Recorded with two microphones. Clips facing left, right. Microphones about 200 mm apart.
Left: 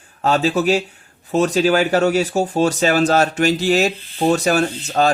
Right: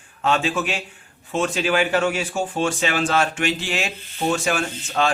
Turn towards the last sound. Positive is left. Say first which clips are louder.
# left 5 dB
turn(degrees=40)  # may be behind; listen again after turning